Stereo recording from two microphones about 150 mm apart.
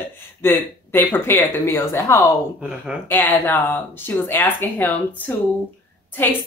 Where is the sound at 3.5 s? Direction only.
15° left (ahead or behind).